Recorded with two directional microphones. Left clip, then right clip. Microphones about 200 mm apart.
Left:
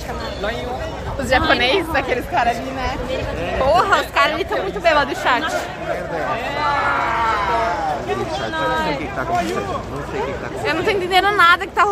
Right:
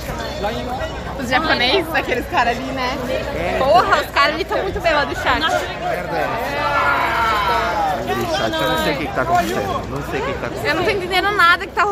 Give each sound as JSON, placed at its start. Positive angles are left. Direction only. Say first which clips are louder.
{"t": 1.5, "sound": "speech", "louder": "even", "side_deg": 15}
{"t": 2.0, "sound": "a woman's voice", "louder": "even", "side_deg": 0}
{"t": 3.6, "sound": "a woman's voice", "louder": "right 1 dB", "side_deg": 5}
{"t": 4.8, "sound": "speech", "louder": "left 2 dB", "side_deg": 20}
{"t": 7.2, "sound": "a sound", "louder": "right 1 dB", "side_deg": -15}
{"t": 8.5, "sound": "a woman's voice", "louder": "left 2 dB", "side_deg": 0}
{"t": 10.7, "sound": "speech", "louder": "left 1 dB", "side_deg": 15}